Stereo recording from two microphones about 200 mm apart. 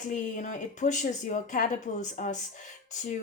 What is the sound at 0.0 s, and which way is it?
Speech, 40° left (ahead or behind).